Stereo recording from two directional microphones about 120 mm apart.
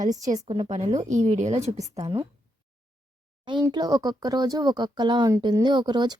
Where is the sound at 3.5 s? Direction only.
40° right (ahead or behind).